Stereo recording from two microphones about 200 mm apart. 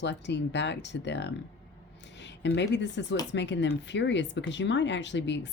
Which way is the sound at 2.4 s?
60° left (ahead or behind).